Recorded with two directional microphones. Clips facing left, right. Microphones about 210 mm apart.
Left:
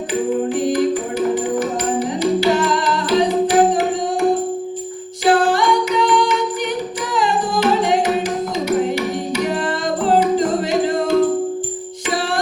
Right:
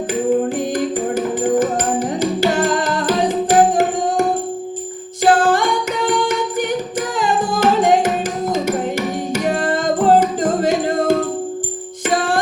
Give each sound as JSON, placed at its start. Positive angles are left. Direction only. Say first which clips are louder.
{"t": 0.7, "sound": "music", "louder": "left 1 dB", "side_deg": -50}